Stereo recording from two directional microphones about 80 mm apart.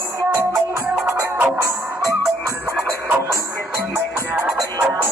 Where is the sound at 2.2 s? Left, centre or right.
Right.